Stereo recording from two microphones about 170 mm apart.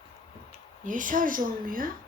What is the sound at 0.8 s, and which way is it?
Speech, 50° right (ahead or behind).